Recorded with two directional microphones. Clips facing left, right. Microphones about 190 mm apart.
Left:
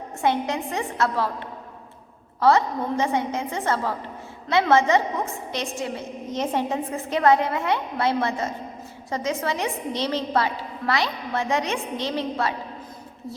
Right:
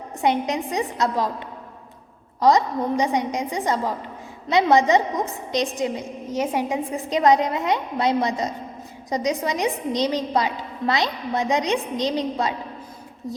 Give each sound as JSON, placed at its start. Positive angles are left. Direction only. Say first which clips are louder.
{"t": 0.2, "sound": "a woman's voice", "louder": "right 2 dB", "side_deg": -15}
{"t": 2.4, "sound": "a woman's voice", "louder": "right 1 dB", "side_deg": -15}